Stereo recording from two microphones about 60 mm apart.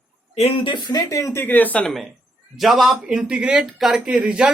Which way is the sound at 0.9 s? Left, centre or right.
Left.